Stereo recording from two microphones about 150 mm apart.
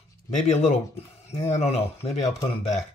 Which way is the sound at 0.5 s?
50° left (ahead or behind).